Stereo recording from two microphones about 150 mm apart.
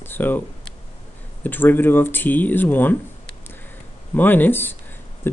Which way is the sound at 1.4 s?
15° left (ahead or behind).